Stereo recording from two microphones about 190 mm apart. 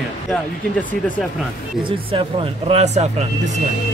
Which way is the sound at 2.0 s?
30° right (ahead or behind).